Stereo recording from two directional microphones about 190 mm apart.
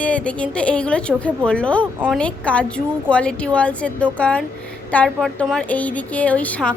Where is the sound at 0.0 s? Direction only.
5° left (ahead or behind).